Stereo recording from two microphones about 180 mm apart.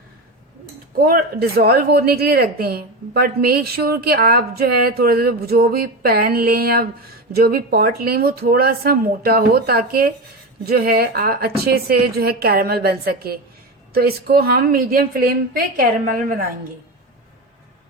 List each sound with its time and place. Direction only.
0.9 s a woman's voice: 55° right (ahead or behind)